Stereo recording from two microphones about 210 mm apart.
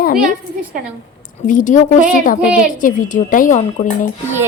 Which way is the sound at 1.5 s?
40° left (ahead or behind).